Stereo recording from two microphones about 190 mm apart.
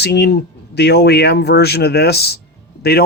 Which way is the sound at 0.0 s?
60° left (ahead or behind).